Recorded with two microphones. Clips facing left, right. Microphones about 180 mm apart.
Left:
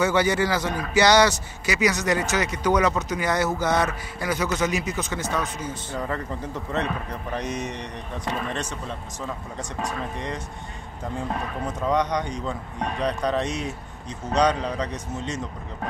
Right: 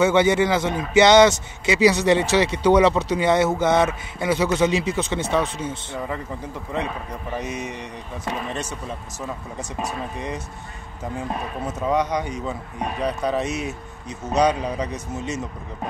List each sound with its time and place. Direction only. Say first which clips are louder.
0.0 s a man's voice: right 4 dB; 25° right (ahead or behind)
5.9 s speech: left 3 dB; 10° right (ahead or behind)